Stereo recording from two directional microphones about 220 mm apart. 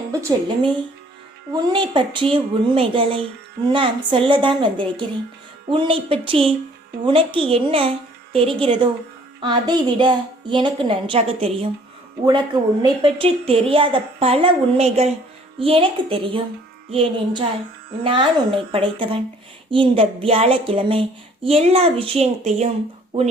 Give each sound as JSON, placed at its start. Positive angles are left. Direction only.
{"t": 0.1, "sound": "speech", "side_deg": -15}
{"t": 1.5, "sound": "speech", "side_deg": -20}
{"t": 12.8, "sound": "speech", "side_deg": -20}